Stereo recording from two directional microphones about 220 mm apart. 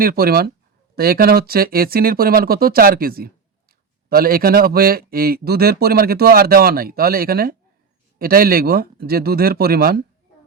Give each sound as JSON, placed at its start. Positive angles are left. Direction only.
{"t": 0.0, "sound": "a man's voice", "side_deg": -40}